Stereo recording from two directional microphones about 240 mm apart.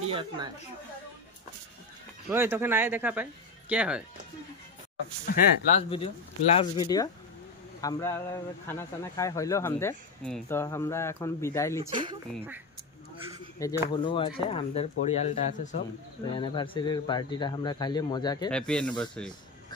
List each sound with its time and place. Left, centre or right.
0.1 s speech: right
2.2 s speech: centre
5.2 s speech: left; by 11.8 s centre
11.9 s speech: centre
13.6 s speech: centre
18.5 s speech: centre